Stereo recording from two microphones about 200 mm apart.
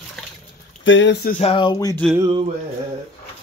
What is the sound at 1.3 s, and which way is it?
Speech, 30° left (ahead or behind).